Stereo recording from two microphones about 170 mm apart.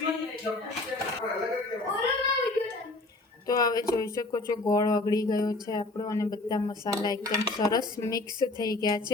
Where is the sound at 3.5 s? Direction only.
20° left (ahead or behind).